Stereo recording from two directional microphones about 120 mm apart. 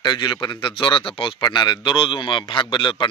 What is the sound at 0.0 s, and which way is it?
A man's voice, 40° left (ahead or behind).